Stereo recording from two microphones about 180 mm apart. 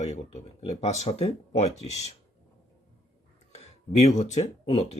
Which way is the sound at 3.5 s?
35° left (ahead or behind).